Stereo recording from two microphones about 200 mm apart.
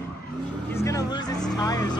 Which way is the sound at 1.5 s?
20° left (ahead or behind).